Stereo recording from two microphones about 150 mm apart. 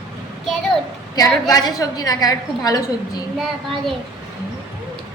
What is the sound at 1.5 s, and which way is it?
A woman's voice, 25° left (ahead or behind).